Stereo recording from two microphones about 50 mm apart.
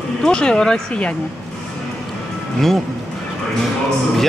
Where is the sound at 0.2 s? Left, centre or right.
Centre.